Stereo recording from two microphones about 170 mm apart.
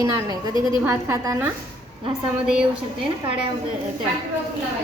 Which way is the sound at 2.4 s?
5° right (ahead or behind).